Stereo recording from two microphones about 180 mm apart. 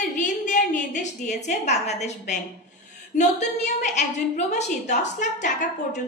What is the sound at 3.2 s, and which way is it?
A woman's voice, 40° left (ahead or behind).